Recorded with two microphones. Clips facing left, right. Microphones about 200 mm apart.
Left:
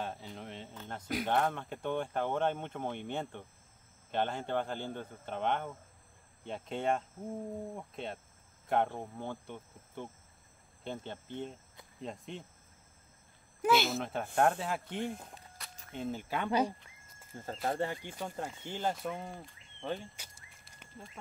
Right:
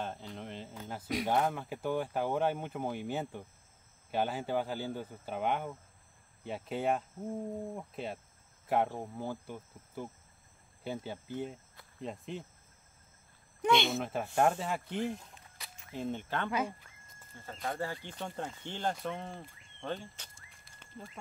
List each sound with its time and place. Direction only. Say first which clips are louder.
0.0 s speech: right 1 dB; centre (ahead or behind)
13.6 s speech: even; 5° left (ahead or behind)
16.4 s speech: left 3 dB; 35° left (ahead or behind)
17.8 s speech: left 1 dB; 15° left (ahead or behind)